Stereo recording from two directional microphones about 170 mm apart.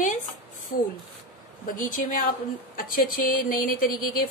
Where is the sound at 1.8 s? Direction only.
50° left (ahead or behind).